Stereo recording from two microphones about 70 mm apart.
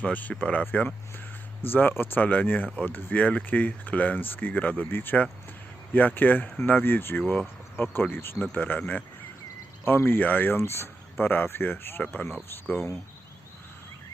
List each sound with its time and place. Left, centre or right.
0.0 s speech: left